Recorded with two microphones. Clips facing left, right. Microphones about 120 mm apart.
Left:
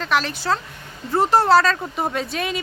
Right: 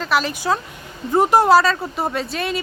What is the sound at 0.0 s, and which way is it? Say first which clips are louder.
Speech: right 2 dB; 5° right (ahead or behind).